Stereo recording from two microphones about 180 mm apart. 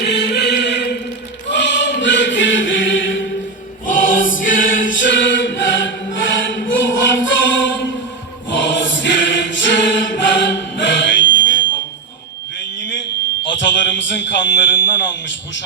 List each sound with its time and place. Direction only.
0.0 s chant: 70° left (ahead or behind); by 3.2 s 90° left
3.8 s choir: 50° left (ahead or behind)
4.9 s choir: 90° left
6.7 s chant: 90° left
8.4 s choir: 90° left
12.5 s a sound: 85° left